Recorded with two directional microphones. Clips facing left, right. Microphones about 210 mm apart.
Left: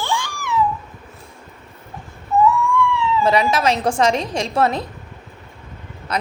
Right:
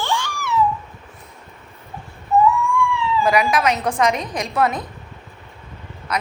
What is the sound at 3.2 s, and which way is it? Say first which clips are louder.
A woman's voice: even; 25° left (ahead or behind).